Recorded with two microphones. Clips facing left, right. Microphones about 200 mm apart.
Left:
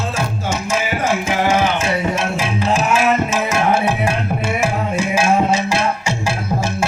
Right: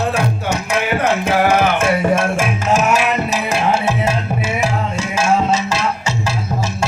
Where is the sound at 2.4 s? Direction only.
45° right (ahead or behind).